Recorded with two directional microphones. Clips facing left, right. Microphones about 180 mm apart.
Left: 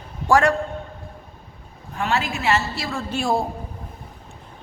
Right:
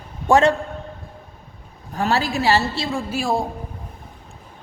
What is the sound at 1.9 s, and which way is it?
Speech, 35° right (ahead or behind).